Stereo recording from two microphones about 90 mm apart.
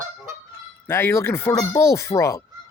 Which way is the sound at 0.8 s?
25° left (ahead or behind).